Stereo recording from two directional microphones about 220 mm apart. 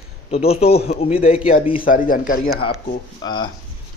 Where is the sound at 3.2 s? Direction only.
20° left (ahead or behind).